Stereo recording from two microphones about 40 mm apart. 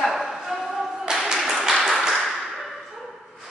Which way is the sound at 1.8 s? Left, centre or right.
Centre.